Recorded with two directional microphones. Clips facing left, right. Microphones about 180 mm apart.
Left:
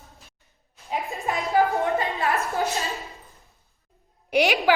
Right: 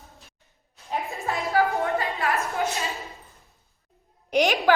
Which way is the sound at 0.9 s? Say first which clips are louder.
Left 1 dB; 15° left (ahead or behind).